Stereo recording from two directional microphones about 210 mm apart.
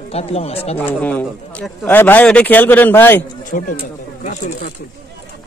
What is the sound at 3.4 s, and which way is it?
Speech, 40° left (ahead or behind).